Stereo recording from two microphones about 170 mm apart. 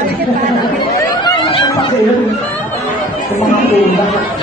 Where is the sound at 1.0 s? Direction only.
25° left (ahead or behind).